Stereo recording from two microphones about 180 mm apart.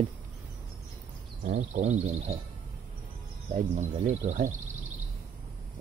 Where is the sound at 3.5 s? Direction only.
40° right (ahead or behind).